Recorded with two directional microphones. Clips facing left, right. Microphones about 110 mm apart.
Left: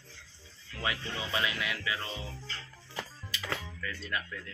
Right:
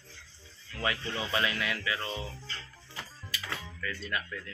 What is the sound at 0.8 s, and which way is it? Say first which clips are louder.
Speech: right 2 dB; 15° left (ahead or behind).